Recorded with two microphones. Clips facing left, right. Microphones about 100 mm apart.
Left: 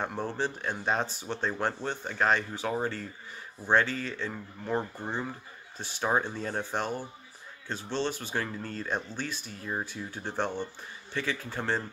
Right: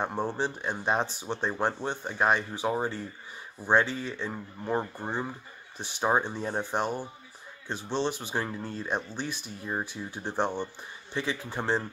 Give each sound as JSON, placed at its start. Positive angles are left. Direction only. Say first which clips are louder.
{"t": 0.0, "sound": "speech", "louder": "right 2 dB", "side_deg": -20}